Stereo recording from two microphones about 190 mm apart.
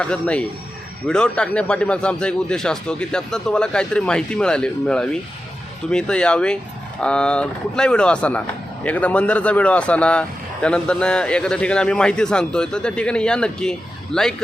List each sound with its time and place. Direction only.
0.0 s speech: 5° left (ahead or behind)